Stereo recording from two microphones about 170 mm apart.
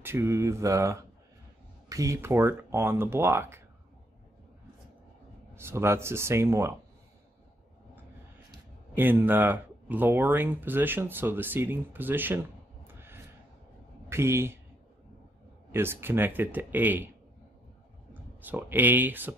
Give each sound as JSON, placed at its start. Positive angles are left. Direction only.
{"t": 0.0, "sound": "speech", "side_deg": -15}
{"t": 5.5, "sound": "speech", "side_deg": -15}
{"t": 8.9, "sound": "speech", "side_deg": -10}
{"t": 12.8, "sound": "a sound", "side_deg": -15}
{"t": 14.0, "sound": "speech", "side_deg": -15}
{"t": 15.7, "sound": "speech", "side_deg": -15}
{"t": 18.4, "sound": "speech", "side_deg": -10}